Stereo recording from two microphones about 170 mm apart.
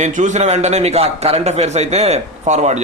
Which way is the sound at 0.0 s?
45° right (ahead or behind).